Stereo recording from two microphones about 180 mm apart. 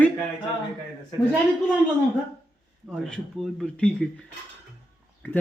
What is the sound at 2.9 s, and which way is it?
A man's voice, 5° left (ahead or behind).